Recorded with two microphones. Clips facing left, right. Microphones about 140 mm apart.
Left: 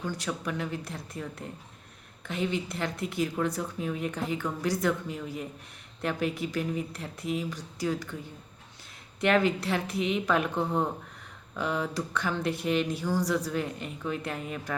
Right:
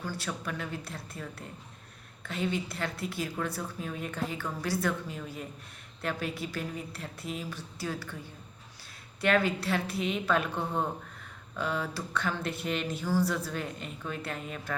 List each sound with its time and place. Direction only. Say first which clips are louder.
0.0 s speech: left 3 dB; 15° left (ahead or behind)
9.2 s speech: left 2 dB; 15° left (ahead or behind)